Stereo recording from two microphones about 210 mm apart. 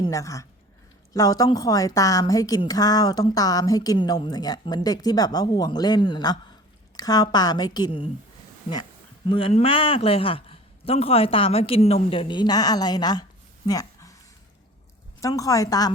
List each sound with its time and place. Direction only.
0.1 s a woman's voice: 15° left (ahead or behind)
9.3 s a man's voice: 25° left (ahead or behind)
13.7 s a sound: 15° left (ahead or behind)
15.2 s a woman's voice: 15° left (ahead or behind)